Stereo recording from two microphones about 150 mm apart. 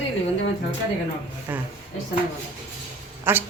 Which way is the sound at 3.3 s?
15° right (ahead or behind).